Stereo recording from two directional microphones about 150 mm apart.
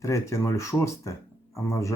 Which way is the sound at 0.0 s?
20° left (ahead or behind).